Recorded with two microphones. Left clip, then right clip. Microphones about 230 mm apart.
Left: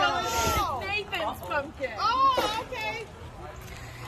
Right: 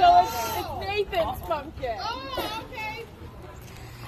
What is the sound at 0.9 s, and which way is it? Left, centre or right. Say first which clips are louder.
Speech: right 5 dB; centre.